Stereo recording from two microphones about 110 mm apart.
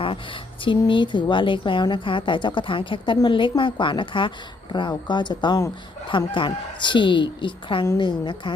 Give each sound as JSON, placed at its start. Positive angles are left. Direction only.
{"t": 0.6, "sound": "a woman's voice", "side_deg": 50}